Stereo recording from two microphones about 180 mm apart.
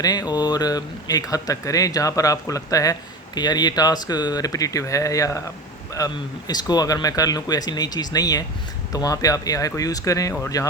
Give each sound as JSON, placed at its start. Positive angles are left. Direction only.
{"t": 0.0, "sound": "speech", "side_deg": 20}